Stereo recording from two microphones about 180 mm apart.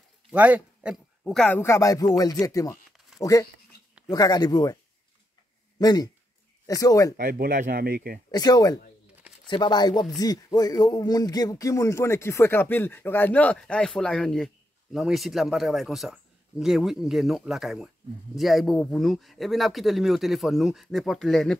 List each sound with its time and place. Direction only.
0.3 s speech: 10° right (ahead or behind); by 4.7 s 25° left (ahead or behind)
5.8 s speech: 20° left (ahead or behind)
7.2 s speech: 55° right (ahead or behind)
8.3 s speech: 20° left (ahead or behind); by 21.5 s centre (ahead or behind)